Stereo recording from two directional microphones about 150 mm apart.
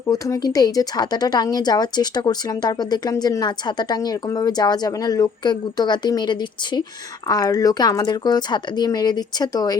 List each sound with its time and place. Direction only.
0.1 s speech: 25° left (ahead or behind)